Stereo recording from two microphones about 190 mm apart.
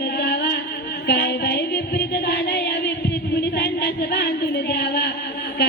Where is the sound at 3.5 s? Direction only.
55° left (ahead or behind).